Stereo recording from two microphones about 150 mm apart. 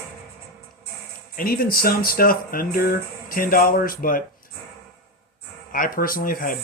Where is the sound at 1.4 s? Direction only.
75° left (ahead or behind).